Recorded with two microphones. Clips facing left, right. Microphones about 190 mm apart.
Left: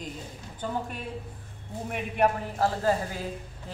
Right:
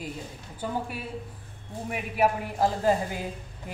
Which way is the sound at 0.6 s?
10° right (ahead or behind).